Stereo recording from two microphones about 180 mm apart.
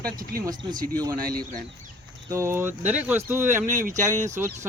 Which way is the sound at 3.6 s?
45° right (ahead or behind).